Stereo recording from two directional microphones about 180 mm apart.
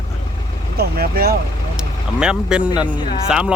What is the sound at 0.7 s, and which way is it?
Speech, 60° right (ahead or behind).